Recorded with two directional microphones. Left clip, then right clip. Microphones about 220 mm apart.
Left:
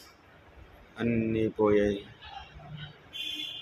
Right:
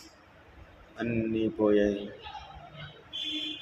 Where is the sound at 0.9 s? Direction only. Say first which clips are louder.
Left 1 dB; 15° left (ahead or behind).